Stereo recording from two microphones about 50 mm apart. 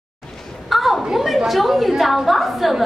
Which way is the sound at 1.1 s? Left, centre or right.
Centre.